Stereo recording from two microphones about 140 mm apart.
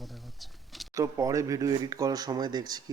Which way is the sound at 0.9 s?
20° right (ahead or behind).